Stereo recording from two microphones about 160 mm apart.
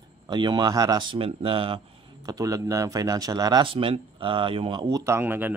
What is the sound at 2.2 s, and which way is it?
Speech, 20° right (ahead or behind).